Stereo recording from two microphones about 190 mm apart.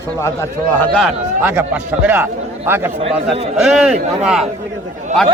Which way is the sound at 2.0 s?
10° right (ahead or behind).